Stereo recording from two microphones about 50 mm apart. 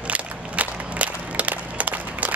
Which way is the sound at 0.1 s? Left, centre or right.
Right.